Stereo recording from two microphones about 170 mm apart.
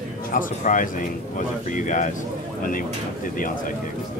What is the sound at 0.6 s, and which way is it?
A man's voice, 50° left (ahead or behind).